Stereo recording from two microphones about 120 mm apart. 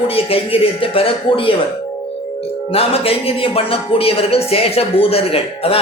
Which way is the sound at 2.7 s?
55° left (ahead or behind).